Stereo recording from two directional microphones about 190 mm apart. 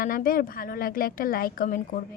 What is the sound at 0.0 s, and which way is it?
Speech, 50° left (ahead or behind).